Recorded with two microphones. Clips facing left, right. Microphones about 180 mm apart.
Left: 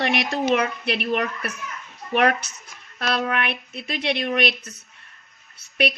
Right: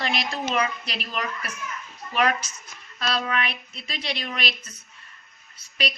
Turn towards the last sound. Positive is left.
turn(degrees=65)  # may be behind; listen again after turning